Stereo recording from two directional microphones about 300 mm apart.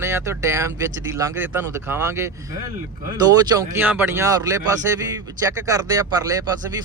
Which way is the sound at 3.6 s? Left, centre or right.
Centre.